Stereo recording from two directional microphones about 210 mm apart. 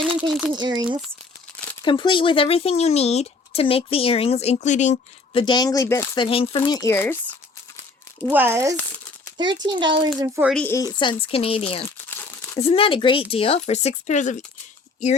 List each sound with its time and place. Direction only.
0.3 s speech: centre (ahead or behind)
0.5 s speech: 20° right (ahead or behind)
1.8 s speech: 20° left (ahead or behind)
6.2 s speech: 25° left (ahead or behind)
6.7 s speech: 15° left (ahead or behind)
8.3 s speech: 10° right (ahead or behind)
10.4 s speech: 5° left (ahead or behind); by 14.3 s 35° left (ahead or behind)